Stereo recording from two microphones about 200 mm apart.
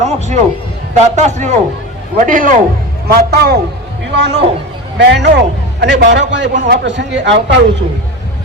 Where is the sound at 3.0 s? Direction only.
55° right (ahead or behind).